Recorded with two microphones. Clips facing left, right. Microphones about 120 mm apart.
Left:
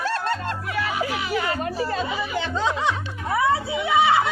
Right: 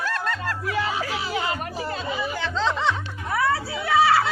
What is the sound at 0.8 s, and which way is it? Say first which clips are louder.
Music: left 2 dB; 30° right (ahead or behind).